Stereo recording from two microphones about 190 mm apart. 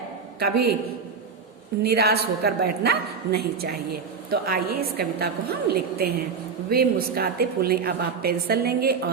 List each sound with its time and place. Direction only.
0.3 s a woman's voice: 55° right (ahead or behind)
1.8 s a woman's voice: 55° right (ahead or behind)